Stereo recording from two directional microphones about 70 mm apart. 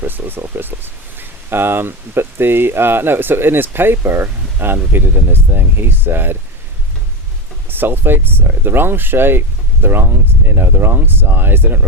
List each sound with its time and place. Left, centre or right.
0.0 s speech: right
7.7 s speech: right